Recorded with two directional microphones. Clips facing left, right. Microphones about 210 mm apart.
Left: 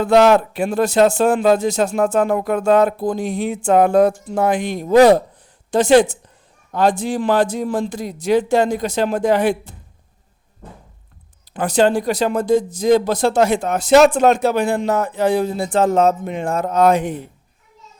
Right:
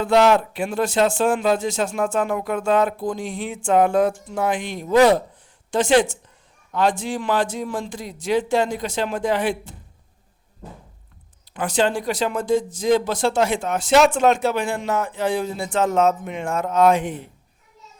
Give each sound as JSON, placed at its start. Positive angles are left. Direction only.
{"t": 0.0, "sound": "speech", "side_deg": 45}
{"t": 11.5, "sound": "speech", "side_deg": 40}